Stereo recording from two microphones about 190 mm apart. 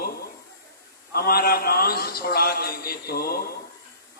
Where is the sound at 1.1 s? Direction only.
55° left (ahead or behind).